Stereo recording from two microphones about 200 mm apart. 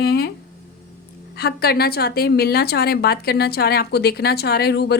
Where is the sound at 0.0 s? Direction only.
50° left (ahead or behind).